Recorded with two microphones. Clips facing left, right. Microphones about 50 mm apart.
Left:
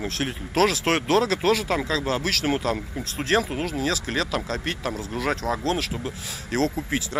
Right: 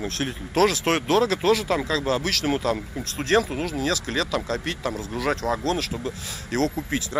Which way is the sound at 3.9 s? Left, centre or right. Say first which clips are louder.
Right 1 dB; left.